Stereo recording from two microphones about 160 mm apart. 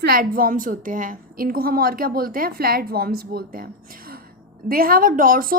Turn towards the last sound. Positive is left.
turn(degrees=-65)  # may be behind; listen again after turning